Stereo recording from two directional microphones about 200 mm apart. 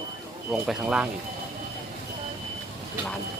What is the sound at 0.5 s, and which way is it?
Speech, 5° right (ahead or behind).